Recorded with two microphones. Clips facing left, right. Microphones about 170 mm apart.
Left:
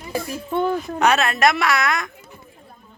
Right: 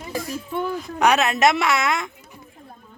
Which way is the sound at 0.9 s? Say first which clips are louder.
Right 2 dB; 15° right (ahead or behind).